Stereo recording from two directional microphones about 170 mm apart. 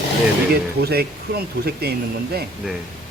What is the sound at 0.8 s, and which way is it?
Speech, 65° right (ahead or behind).